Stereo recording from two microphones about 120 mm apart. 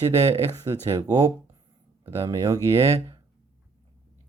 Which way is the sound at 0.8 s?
25° right (ahead or behind).